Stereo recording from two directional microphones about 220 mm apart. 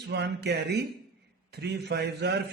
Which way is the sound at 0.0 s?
50° right (ahead or behind).